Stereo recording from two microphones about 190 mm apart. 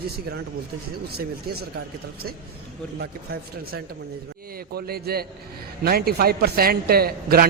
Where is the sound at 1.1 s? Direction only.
55° right (ahead or behind).